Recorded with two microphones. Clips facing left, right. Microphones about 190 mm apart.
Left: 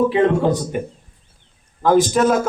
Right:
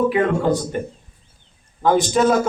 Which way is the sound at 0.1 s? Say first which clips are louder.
Left 2 dB; 20° left (ahead or behind).